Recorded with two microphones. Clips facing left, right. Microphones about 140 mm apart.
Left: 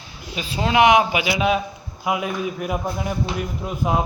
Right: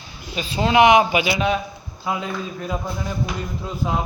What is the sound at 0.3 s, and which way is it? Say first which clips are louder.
A man's voice: right 2 dB; 5° left (ahead or behind).